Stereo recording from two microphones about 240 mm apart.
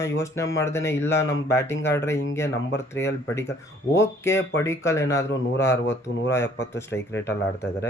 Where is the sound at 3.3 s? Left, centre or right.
Centre.